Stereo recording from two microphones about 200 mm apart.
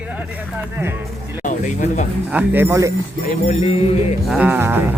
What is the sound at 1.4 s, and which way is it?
Speech, 35° left (ahead or behind).